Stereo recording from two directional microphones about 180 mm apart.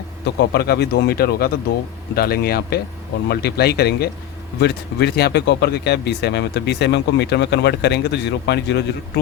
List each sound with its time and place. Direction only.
0.3 s speech: 60° left (ahead or behind)